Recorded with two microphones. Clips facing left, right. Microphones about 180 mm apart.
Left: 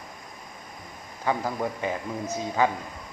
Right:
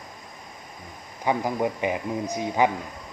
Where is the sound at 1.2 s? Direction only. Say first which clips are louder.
Right 3 dB; 15° right (ahead or behind).